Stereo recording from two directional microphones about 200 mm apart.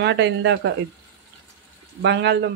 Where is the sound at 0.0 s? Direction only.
65° right (ahead or behind).